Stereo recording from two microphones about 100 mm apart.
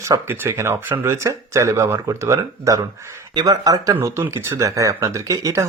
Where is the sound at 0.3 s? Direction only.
25° right (ahead or behind).